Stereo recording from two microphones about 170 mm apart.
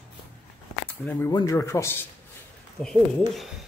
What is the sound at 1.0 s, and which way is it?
Speech, 10° left (ahead or behind).